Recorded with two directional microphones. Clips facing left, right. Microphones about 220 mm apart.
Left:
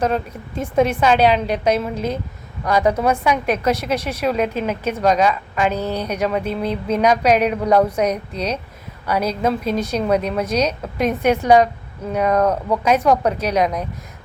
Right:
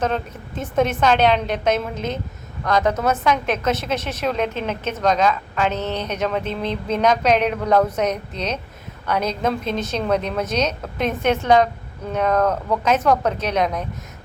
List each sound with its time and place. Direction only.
0.0 s a woman's voice: 10° left (ahead or behind)
2.6 s a woman's voice: 10° left (ahead or behind)